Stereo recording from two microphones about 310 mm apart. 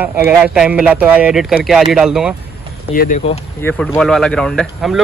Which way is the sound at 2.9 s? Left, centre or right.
Left.